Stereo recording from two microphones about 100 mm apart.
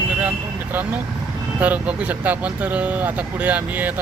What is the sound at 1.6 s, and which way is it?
Speech, 15° right (ahead or behind).